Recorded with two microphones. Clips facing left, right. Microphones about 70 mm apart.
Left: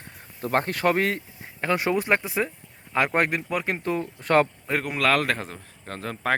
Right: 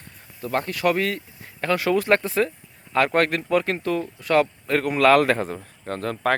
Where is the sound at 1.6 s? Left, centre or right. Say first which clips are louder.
Right 3 dB; left.